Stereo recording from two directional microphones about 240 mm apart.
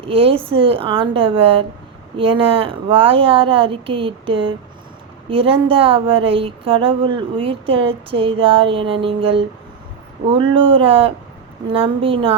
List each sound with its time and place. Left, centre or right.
0.0 s speech: right